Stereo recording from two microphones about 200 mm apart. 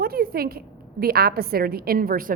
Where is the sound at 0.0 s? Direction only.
50° right (ahead or behind).